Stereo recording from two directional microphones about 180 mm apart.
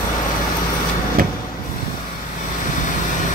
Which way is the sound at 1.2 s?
55° right (ahead or behind).